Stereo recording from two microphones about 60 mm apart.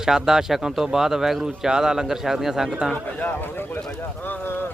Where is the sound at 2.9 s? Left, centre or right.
Left.